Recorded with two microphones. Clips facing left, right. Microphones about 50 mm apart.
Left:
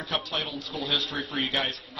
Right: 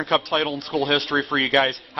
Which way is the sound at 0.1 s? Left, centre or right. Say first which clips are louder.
Right 9 dB; right.